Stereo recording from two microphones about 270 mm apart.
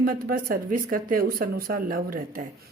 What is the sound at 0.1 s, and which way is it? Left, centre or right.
Speech, right.